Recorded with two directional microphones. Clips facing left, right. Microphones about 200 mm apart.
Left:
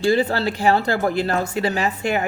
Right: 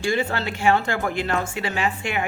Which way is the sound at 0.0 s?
35° left (ahead or behind).